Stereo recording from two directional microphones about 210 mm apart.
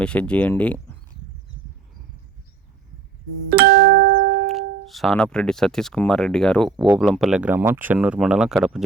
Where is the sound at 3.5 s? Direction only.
45° right (ahead or behind).